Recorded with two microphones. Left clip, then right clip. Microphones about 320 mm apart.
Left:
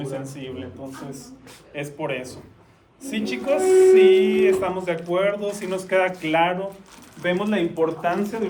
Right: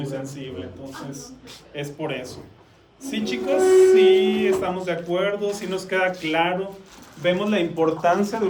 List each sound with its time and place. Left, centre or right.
0.0 s speech: centre
1.7 s speech: centre